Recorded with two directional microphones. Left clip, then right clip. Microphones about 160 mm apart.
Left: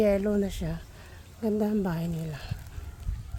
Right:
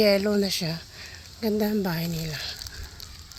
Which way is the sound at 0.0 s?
10° right (ahead or behind).